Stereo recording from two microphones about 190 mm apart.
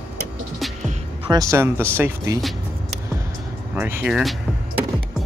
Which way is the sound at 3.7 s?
10° right (ahead or behind).